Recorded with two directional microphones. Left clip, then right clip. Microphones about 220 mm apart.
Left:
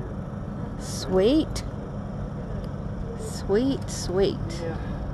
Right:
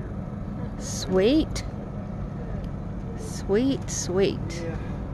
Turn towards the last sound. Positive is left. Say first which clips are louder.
# even
turn(degrees=-10)  # may be behind; listen again after turning